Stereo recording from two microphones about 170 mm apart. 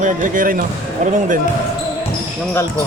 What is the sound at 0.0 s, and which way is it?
Speech, 50° right (ahead or behind).